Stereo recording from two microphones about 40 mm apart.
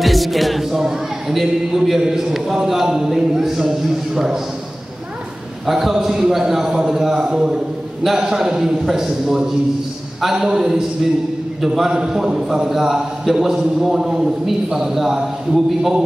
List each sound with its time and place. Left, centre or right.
0.0 s music: centre
1.8 s a man's voice: centre
5.7 s a man's voice: centre